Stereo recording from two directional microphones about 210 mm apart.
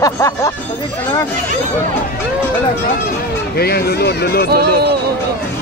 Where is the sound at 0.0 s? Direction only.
15° left (ahead or behind).